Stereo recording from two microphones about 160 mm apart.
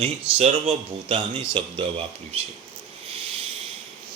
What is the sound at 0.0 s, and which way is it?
Speech, 40° right (ahead or behind).